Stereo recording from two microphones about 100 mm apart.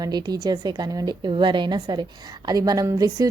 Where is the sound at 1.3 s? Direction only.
55° right (ahead or behind).